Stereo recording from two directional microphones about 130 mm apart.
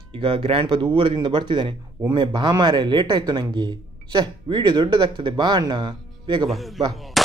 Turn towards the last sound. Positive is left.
turn(degrees=0)  # may be behind; listen again after turning